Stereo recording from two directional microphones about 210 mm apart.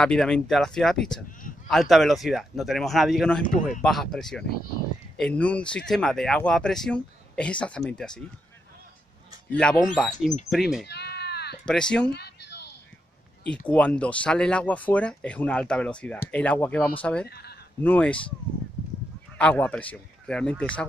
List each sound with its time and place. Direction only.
0.0 s speech: 5° left (ahead or behind)
9.5 s speech: 5° left (ahead or behind)
10.9 s cat: 50° left (ahead or behind)
11.6 s speech: 5° left (ahead or behind)
12.1 s a sound: 50° left (ahead or behind)
13.5 s speech: 5° left (ahead or behind)
17.3 s speech: 50° left (ahead or behind)
17.8 s a man's voice: 5° left (ahead or behind)
19.3 s a man's voice: 5° left (ahead or behind)